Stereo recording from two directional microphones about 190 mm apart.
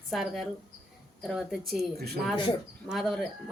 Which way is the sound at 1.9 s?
55° right (ahead or behind).